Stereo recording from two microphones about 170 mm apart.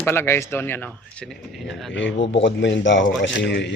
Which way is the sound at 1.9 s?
90° left.